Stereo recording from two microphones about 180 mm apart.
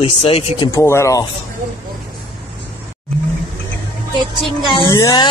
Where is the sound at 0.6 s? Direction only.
15° left (ahead or behind).